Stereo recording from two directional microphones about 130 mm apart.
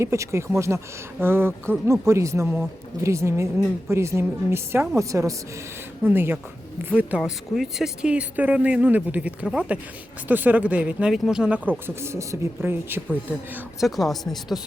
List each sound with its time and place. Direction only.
0.0 s speech: 20° right (ahead or behind)
7.2 s speech: centre (ahead or behind)
13.7 s speech: centre (ahead or behind)